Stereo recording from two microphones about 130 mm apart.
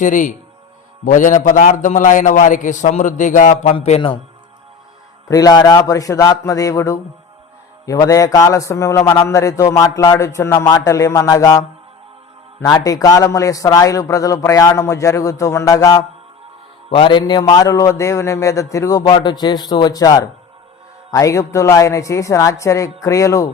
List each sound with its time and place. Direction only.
0.0 s a man's voice: 85° left; by 3.8 s 60° left (ahead or behind)
5.3 s a man's voice: 30° left (ahead or behind)
12.6 s a man's voice: 30° left (ahead or behind)
16.9 s a man's voice: 35° left (ahead or behind)